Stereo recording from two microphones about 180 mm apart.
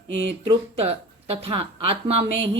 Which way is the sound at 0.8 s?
35° right (ahead or behind).